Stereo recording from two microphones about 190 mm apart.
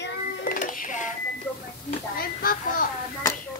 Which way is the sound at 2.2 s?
50° left (ahead or behind).